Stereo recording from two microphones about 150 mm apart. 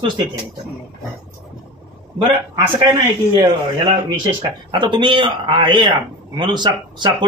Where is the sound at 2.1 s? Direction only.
30° right (ahead or behind).